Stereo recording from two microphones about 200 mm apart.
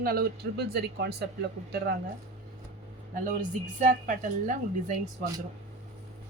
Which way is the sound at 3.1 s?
40° right (ahead or behind).